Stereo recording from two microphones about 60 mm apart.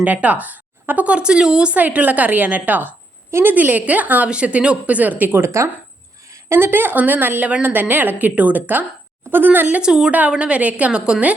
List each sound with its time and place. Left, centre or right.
0.0 s a woman's voice: right
1.7 s a woman's voice: right
5.4 s a woman's voice: right
9.8 s a woman's voice: centre